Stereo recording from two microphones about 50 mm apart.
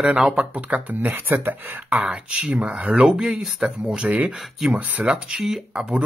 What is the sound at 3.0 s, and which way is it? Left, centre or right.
Speech, centre.